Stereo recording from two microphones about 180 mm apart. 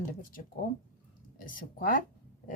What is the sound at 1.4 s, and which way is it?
Speech, 50° left (ahead or behind).